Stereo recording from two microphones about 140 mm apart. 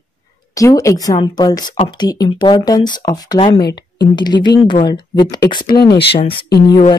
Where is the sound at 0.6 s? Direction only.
20° left (ahead or behind).